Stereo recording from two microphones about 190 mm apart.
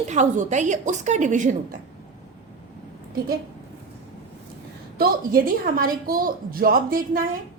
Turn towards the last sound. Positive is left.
turn(degrees=-50)  # may be behind; listen again after turning